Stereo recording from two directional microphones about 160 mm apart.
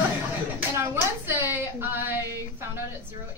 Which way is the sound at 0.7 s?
15° right (ahead or behind).